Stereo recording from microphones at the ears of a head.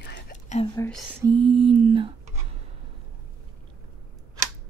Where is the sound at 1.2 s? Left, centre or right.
Right.